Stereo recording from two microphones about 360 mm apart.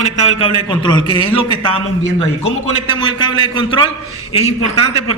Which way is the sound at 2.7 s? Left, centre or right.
Right.